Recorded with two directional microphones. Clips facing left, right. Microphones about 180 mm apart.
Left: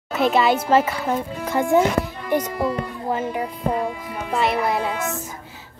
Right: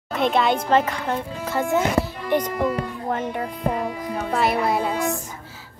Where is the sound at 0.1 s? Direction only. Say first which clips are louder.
Left 2 dB; 5° left (ahead or behind).